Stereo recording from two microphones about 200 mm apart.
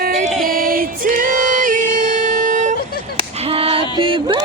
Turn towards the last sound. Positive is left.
turn(degrees=-25)  # may be behind; listen again after turning